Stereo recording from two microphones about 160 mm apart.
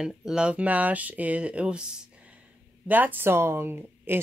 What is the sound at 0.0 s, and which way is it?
Speech, 5° right (ahead or behind).